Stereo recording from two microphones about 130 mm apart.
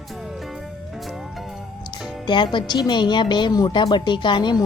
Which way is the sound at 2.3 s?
35° left (ahead or behind).